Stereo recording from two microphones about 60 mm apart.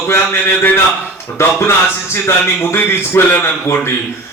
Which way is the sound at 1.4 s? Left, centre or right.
Left.